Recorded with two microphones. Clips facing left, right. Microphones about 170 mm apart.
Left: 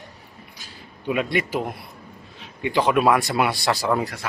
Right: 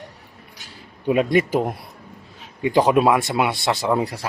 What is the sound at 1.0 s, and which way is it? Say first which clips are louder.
Speech: right 6 dB; 40° right (ahead or behind).